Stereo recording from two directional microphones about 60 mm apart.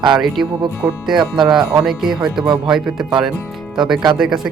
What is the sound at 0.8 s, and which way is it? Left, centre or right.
Speech, right.